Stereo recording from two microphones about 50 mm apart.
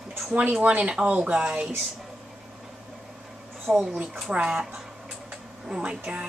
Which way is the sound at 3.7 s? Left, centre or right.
Right.